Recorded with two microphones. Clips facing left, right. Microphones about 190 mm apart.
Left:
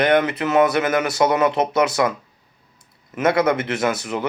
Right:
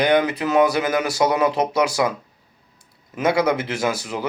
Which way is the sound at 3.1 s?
Centre (ahead or behind).